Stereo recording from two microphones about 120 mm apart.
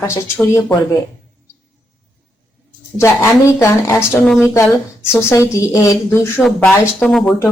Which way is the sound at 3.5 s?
25° left (ahead or behind).